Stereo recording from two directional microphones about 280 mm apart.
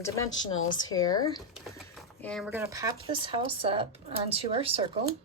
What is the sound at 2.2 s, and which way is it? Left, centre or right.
A woman's voice, centre.